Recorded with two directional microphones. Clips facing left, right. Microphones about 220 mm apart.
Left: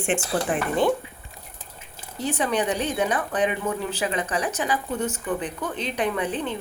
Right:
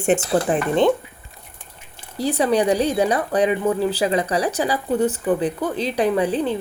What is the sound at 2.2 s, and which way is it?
A woman's voice, 35° right (ahead or behind).